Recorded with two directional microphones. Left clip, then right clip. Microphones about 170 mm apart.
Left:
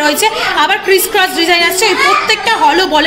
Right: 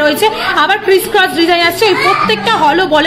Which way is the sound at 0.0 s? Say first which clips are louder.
Right 1 dB; 50° right (ahead or behind).